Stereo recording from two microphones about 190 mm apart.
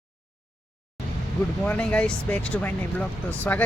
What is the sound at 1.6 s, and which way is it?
Speech, 5° left (ahead or behind).